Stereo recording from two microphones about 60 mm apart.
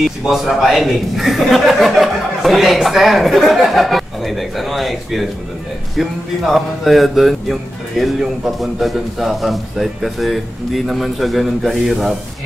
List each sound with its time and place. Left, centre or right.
0.2 s a man's voice: centre